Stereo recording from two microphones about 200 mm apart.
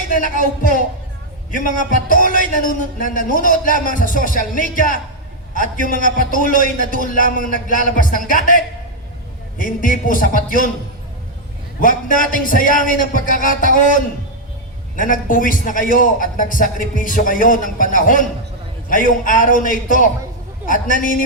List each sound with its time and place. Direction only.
0.1 s a man's voice: 40° left (ahead or behind)
11.8 s a man's voice: 40° left (ahead or behind)